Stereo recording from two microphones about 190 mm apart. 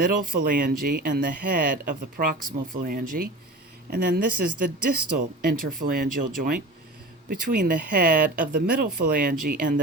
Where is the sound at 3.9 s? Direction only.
60° right (ahead or behind).